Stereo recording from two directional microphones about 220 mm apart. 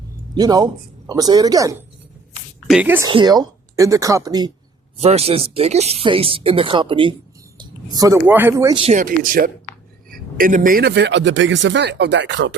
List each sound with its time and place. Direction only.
0.3 s speech: 20° right (ahead or behind)
3.1 s speech: 20° right (ahead or behind)
4.9 s speech: 30° right (ahead or behind); by 12.5 s 55° right (ahead or behind)